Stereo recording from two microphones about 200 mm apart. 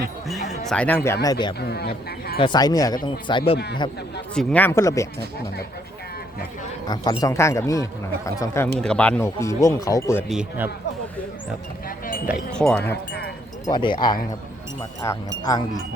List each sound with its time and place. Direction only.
0.3 s speech: 5° left (ahead or behind); by 1.5 s 20° left (ahead or behind)
1.5 s speech: 55° left (ahead or behind)
2.4 s speech: 20° left (ahead or behind)
4.4 s speech: 10° left (ahead or behind)
6.8 s speech: 20° left (ahead or behind)
10.2 s speech: 5° right (ahead or behind)
11.9 s a sound: 45° left (ahead or behind)
12.5 s speech: 5° left (ahead or behind)
13.7 s speech: 25° left (ahead or behind)